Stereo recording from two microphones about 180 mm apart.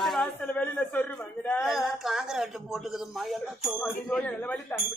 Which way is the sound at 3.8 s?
10° left (ahead or behind).